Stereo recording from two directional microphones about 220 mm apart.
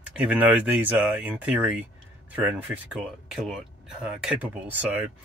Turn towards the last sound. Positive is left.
turn(degrees=-5)  # may be behind; listen again after turning